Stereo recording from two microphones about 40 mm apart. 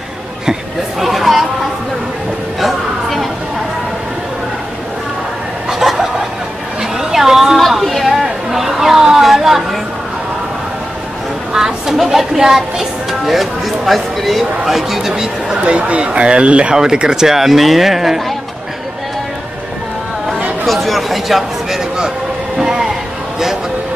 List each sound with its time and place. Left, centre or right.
0.5 s chatter: centre
2.6 s a sound: centre
5.7 s snicker: centre
7.0 s a sound: centre
7.5 s chatter: centre
11.5 s speech: centre
15.5 s speech: right
16.7 s speech: centre
20.6 s a sound: centre